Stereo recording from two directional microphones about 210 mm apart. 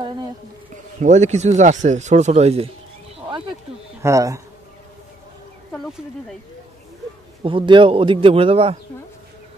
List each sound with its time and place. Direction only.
1.0 s speech: 35° right (ahead or behind)
4.0 s speech: 15° right (ahead or behind)
5.7 s speech: centre (ahead or behind)
7.4 s a man's voice: 25° right (ahead or behind)